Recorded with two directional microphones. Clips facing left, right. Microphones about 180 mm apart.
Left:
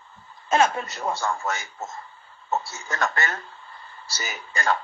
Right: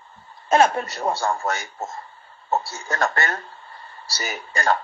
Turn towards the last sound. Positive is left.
turn(degrees=-35)  # may be behind; listen again after turning